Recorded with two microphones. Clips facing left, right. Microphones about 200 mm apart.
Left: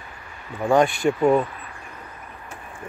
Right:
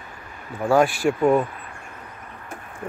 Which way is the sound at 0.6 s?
Centre (ahead or behind).